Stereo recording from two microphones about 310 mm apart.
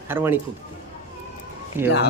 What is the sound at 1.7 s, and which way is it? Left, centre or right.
Speech, centre.